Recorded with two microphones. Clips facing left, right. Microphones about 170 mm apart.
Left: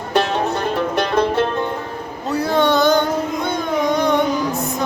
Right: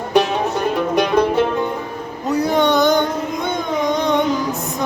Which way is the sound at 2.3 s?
15° right (ahead or behind).